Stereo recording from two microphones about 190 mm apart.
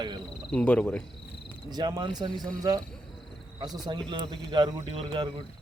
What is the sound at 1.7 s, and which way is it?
A man's voice, 25° right (ahead or behind).